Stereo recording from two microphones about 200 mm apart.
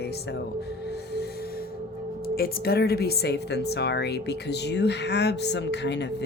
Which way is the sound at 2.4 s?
50° left (ahead or behind).